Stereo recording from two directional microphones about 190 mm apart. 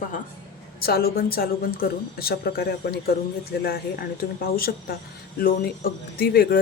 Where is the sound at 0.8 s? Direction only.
55° left (ahead or behind).